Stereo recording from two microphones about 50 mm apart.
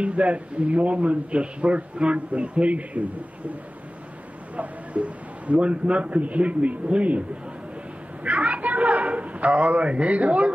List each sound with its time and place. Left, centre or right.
0.0 s speech: right
4.6 s speech: right